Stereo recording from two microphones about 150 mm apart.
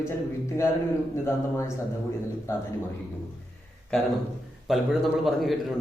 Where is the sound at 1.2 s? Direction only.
20° left (ahead or behind).